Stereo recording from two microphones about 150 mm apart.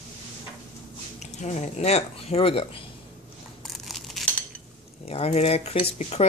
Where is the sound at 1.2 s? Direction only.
50° left (ahead or behind).